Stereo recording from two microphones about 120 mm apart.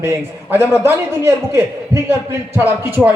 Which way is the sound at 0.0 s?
20° right (ahead or behind).